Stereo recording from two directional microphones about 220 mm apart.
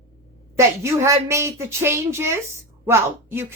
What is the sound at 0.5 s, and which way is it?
A woman's voice, 10° right (ahead or behind).